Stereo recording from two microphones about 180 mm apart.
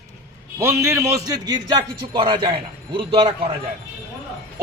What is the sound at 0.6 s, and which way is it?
A man's voice, 15° right (ahead or behind).